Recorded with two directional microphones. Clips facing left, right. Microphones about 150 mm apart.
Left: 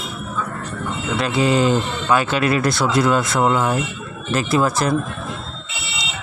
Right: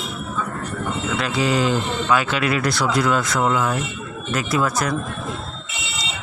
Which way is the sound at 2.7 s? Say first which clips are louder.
Left 2 dB; 25° left (ahead or behind).